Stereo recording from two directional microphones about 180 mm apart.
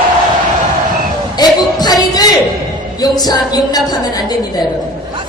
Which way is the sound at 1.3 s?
20° left (ahead or behind).